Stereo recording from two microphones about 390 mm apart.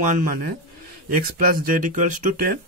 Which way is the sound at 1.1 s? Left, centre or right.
Right.